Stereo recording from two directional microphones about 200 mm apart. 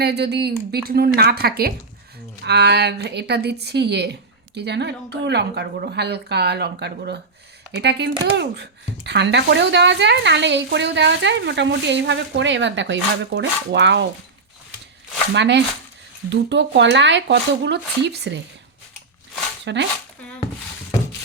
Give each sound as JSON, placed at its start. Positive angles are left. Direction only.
{"t": 0.0, "sound": "a woman's voice", "side_deg": -55}
{"t": 15.3, "sound": "a woman's voice", "side_deg": -60}
{"t": 19.7, "sound": "a woman's voice", "side_deg": -60}